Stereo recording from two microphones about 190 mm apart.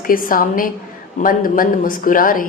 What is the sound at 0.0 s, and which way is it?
Speech, 45° left (ahead or behind).